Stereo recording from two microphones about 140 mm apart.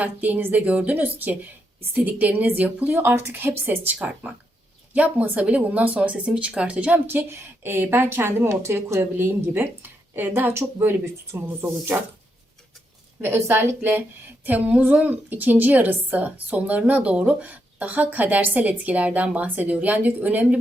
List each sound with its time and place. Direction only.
0.0 s a woman's voice: 10° right (ahead or behind)
13.2 s a woman's voice: 15° right (ahead or behind)